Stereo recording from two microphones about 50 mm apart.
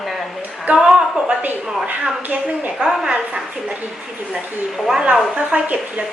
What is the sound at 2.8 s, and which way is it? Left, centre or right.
Speech, centre.